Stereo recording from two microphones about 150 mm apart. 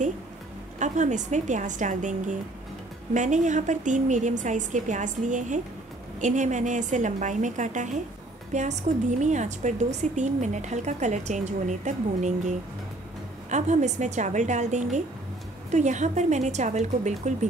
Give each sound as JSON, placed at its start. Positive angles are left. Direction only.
{"t": 0.7, "sound": "a woman's voice", "side_deg": -55}